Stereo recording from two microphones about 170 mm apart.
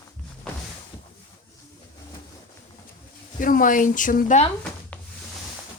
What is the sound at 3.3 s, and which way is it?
Speech, 50° left (ahead or behind).